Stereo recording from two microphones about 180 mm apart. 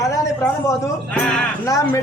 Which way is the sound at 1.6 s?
15° left (ahead or behind).